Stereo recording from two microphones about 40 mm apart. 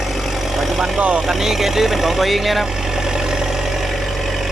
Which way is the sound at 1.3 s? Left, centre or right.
Centre.